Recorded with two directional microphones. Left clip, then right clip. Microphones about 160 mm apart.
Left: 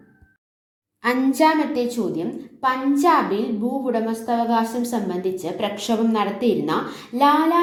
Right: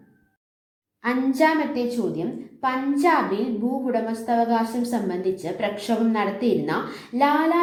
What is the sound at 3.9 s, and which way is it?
A woman's voice, 15° left (ahead or behind).